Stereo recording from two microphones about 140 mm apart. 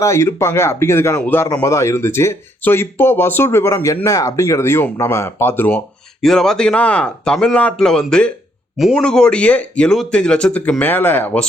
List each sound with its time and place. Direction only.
0.0 s speech: 20° left (ahead or behind)
6.2 s speech: 5° left (ahead or behind)